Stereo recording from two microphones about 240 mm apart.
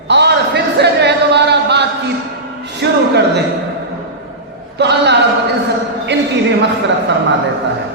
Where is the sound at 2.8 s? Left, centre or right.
Right.